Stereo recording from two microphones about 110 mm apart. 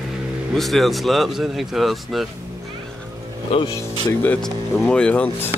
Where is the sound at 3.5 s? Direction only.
60° left (ahead or behind).